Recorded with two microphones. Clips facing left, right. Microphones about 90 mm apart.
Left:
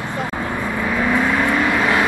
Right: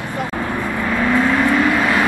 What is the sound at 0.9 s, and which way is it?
Vehicle, 5° left (ahead or behind).